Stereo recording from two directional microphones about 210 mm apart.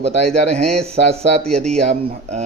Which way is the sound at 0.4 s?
30° right (ahead or behind).